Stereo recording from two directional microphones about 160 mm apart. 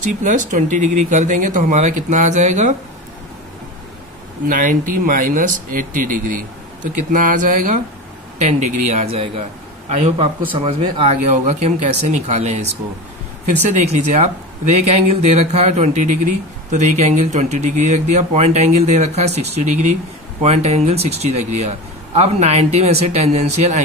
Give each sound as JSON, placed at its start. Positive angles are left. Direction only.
{"t": 0.0, "sound": "speech", "side_deg": -50}
{"t": 4.5, "sound": "a man's voice", "side_deg": -60}
{"t": 13.7, "sound": "speech", "side_deg": -50}